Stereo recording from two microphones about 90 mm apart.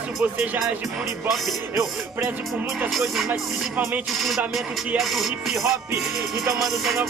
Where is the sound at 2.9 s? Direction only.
Centre (ahead or behind).